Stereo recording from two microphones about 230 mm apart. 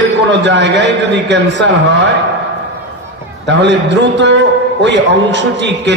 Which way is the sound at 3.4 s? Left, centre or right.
Right.